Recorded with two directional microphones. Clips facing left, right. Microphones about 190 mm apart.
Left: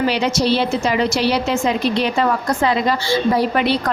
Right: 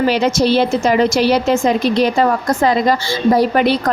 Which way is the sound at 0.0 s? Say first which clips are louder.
Right 4 dB; 45° right (ahead or behind).